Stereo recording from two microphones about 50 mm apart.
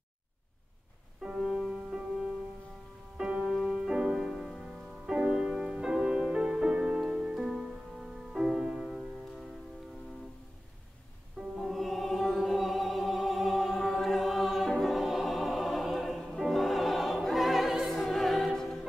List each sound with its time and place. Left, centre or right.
1.2 s music: centre
11.5 s music: centre